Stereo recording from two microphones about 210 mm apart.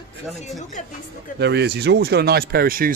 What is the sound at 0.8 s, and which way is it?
Speech, 35° left (ahead or behind).